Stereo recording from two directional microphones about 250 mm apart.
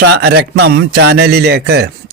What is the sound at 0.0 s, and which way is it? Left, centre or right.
Speech, right.